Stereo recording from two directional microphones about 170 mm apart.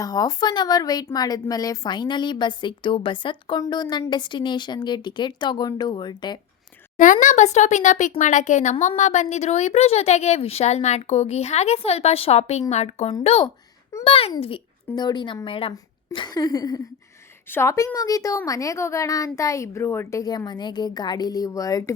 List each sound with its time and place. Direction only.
0.0 s a woman's voice: 20° left (ahead or behind)
6.9 s a woman's voice: 50° left (ahead or behind); by 21.9 s 20° left (ahead or behind)